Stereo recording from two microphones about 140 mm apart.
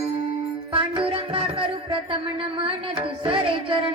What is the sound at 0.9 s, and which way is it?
Music, 40° right (ahead or behind).